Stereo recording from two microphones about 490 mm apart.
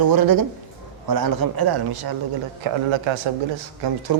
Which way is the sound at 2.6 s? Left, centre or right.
Right.